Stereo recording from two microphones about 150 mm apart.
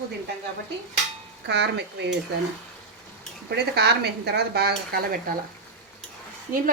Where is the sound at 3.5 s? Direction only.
90° right.